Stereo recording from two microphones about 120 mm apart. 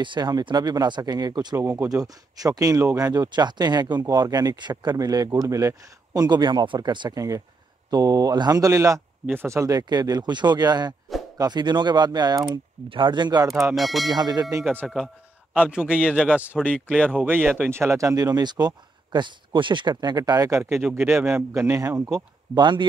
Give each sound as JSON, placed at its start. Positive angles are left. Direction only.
{"t": 0.0, "sound": "speech", "side_deg": -40}
{"t": 1.6, "sound": "speech", "side_deg": -25}
{"t": 13.7, "sound": "speech", "side_deg": 0}
{"t": 14.1, "sound": "speech", "side_deg": -35}
{"t": 14.8, "sound": "a man's voice", "side_deg": 0}
{"t": 17.1, "sound": "speech", "side_deg": -10}
{"t": 21.0, "sound": "speech", "side_deg": -10}
{"t": 22.5, "sound": "speech", "side_deg": -40}